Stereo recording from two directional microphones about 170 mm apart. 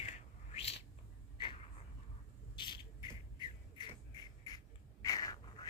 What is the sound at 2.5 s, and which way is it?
Squawk, 25° left (ahead or behind).